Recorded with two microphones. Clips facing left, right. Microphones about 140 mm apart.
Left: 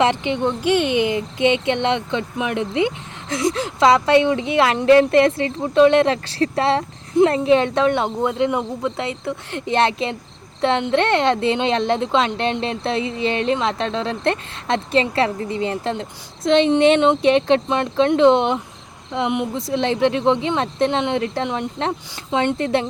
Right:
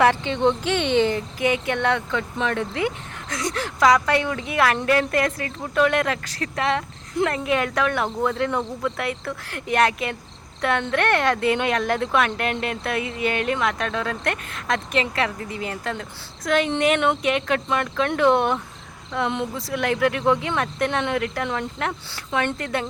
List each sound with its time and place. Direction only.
0.0 s speech: 20° left (ahead or behind)